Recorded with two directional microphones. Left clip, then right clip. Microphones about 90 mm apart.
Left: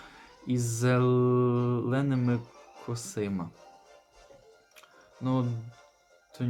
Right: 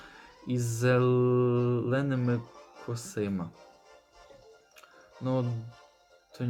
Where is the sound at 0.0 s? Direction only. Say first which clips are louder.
Left 1 dB; centre (ahead or behind).